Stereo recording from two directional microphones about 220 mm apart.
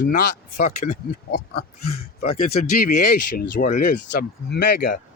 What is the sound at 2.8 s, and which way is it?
Speech, 40° left (ahead or behind).